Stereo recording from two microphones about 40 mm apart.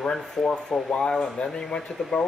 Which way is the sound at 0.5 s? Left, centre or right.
Centre.